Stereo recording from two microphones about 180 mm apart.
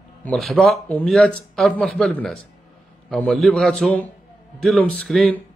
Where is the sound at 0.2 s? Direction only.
5° left (ahead or behind).